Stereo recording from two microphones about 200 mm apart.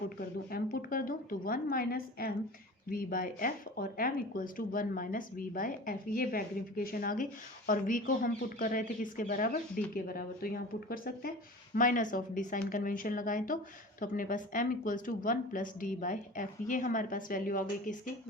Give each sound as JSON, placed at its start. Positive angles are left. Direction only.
{"t": 0.5, "sound": "a woman's voice", "side_deg": 45}